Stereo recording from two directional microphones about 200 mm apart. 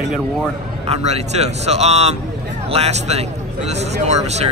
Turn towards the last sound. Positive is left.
turn(degrees=-35)  # may be behind; listen again after turning